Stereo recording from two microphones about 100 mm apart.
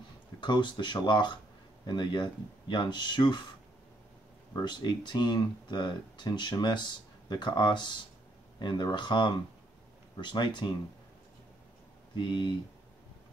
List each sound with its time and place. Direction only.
0.4 s speech: 50° left (ahead or behind)
4.6 s speech: 50° left (ahead or behind)
12.2 s speech: 50° left (ahead or behind)